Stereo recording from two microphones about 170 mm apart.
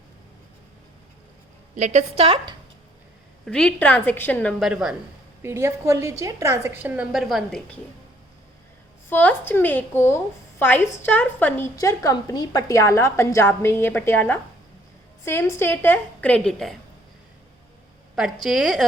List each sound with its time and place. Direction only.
1.7 s a woman's voice: 45° right (ahead or behind)
3.4 s a woman's voice: 5° left (ahead or behind)
4.7 s a woman's voice: 5° right (ahead or behind)
5.4 s a woman's voice: 15° right (ahead or behind); by 7.8 s centre (ahead or behind)
9.0 s a woman's voice: 10° left (ahead or behind)
18.2 s a woman's voice: 5° right (ahead or behind)